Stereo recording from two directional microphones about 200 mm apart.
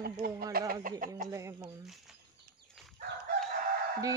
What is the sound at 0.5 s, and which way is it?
Speech, 45° right (ahead or behind).